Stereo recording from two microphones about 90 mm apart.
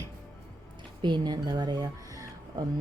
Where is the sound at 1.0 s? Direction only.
55° right (ahead or behind).